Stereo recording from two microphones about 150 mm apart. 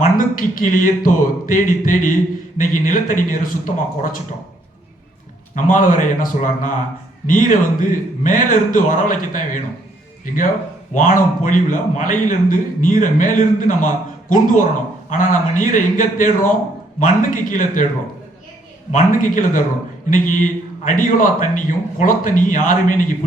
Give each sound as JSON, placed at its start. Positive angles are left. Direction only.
{"t": 0.0, "sound": "a man's voice", "side_deg": 65}
{"t": 5.5, "sound": "a man's voice", "side_deg": 60}
{"t": 18.9, "sound": "a man's voice", "side_deg": 60}